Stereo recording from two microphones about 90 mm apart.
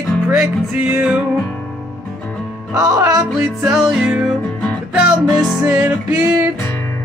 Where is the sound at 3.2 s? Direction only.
10° right (ahead or behind).